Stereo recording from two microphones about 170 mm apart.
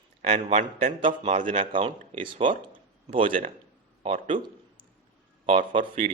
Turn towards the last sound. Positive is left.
turn(degrees=-30)  # may be behind; listen again after turning